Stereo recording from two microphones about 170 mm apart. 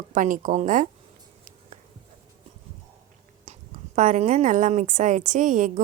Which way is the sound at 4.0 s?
45° right (ahead or behind).